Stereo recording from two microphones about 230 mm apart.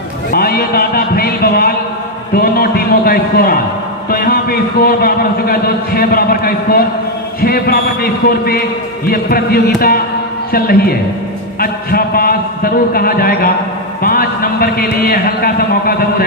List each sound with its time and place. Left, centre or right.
0.3 s music: left
2.3 s a sound: left
4.1 s a man's voice: left